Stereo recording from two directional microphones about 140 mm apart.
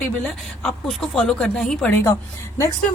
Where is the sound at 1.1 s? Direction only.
5° left (ahead or behind).